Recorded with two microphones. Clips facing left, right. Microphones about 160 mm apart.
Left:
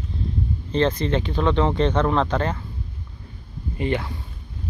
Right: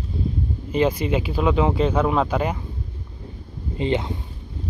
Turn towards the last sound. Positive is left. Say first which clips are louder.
# right 2 dB
turn(degrees=-20)  # may be behind; listen again after turning